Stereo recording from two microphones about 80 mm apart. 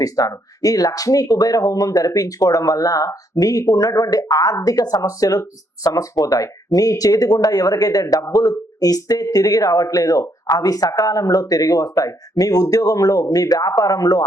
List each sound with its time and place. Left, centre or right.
0.0 s speech: left